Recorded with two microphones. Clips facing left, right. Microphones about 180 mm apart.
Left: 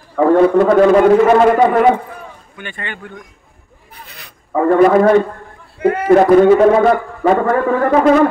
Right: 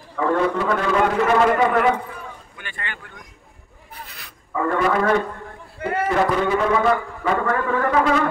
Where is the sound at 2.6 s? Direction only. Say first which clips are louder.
Left 7 dB; 20° left (ahead or behind).